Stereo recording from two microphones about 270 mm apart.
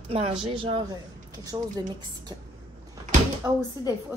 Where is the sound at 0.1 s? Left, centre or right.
Right.